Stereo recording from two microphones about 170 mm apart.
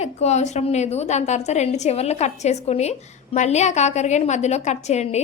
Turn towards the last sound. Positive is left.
turn(degrees=40)  # may be behind; listen again after turning